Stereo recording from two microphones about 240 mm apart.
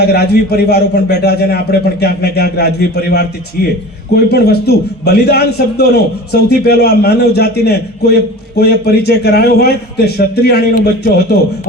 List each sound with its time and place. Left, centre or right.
0.0 s a man's voice: left